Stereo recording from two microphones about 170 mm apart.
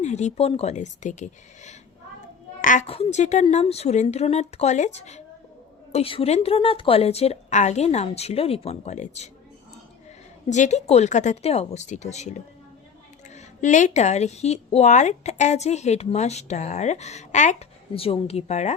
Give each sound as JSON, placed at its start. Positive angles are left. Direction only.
{"t": 0.0, "sound": "speech", "side_deg": 40}
{"t": 2.6, "sound": "a sound", "side_deg": 50}
{"t": 2.8, "sound": "a woman's voice", "side_deg": 35}
{"t": 10.5, "sound": "a woman's voice", "side_deg": 45}